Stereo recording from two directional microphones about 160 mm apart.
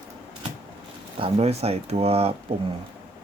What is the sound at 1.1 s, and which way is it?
Speech, 35° right (ahead or behind).